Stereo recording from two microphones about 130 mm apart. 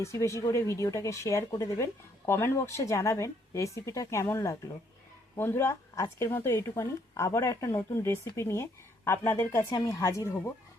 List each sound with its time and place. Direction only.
0.0 s speech: 20° left (ahead or behind)